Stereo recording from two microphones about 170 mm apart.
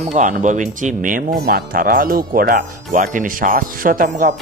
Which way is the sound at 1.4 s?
60° right (ahead or behind).